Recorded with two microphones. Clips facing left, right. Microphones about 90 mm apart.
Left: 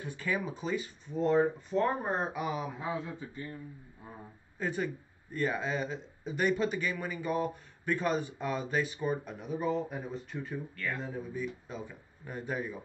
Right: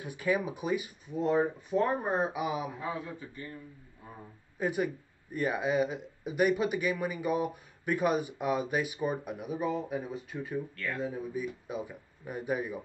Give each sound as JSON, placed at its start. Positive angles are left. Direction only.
{"t": 0.0, "sound": "speech", "side_deg": -15}
{"t": 2.8, "sound": "a man's voice", "side_deg": 20}
{"t": 4.6, "sound": "speech", "side_deg": -10}